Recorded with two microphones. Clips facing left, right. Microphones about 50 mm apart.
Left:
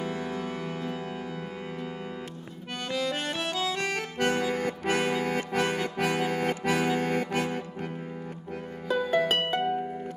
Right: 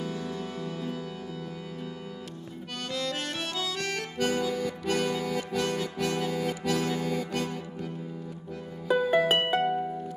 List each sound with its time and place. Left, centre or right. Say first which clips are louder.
0.0 s music: left 2 dB; left
2.9 s accordion: left 3 dB; centre
3.4 s accordion: left 3 dB; left
4.2 s music: left 1 dB; left
8.8 s music: right 2 dB; centre